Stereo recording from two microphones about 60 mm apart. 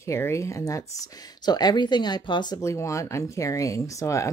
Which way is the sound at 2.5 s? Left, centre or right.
Left.